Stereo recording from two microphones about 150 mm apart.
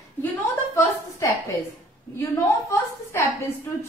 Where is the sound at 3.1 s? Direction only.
15° left (ahead or behind).